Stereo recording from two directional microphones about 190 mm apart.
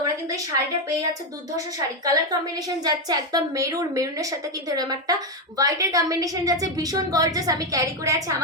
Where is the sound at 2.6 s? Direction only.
20° right (ahead or behind).